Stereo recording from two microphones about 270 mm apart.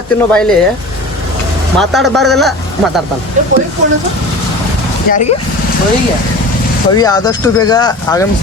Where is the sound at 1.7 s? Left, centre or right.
Centre.